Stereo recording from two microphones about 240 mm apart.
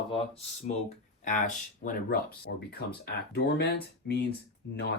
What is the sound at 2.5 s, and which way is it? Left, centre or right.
Speech, left.